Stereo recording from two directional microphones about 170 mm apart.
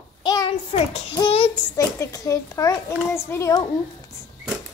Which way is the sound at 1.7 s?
20° left (ahead or behind).